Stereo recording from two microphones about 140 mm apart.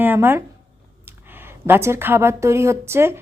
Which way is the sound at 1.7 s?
20° right (ahead or behind).